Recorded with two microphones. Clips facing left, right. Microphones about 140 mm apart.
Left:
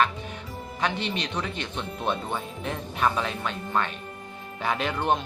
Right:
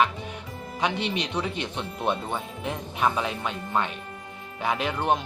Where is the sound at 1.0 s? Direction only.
10° right (ahead or behind).